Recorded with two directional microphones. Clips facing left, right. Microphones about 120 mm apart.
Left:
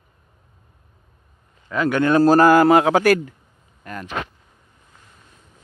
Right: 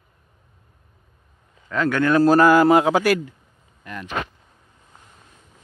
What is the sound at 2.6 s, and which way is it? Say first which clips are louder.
Speech: left 1 dB; 65° left (ahead or behind).